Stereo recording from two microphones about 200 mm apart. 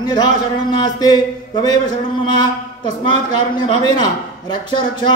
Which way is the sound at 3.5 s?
20° left (ahead or behind).